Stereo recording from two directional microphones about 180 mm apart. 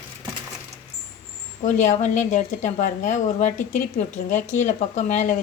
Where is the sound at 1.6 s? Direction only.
45° left (ahead or behind).